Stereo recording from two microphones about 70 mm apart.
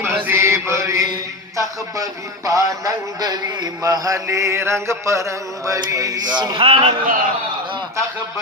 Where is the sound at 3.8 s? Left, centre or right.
Right.